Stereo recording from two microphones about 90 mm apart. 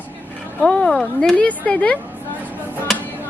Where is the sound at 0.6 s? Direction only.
5° left (ahead or behind).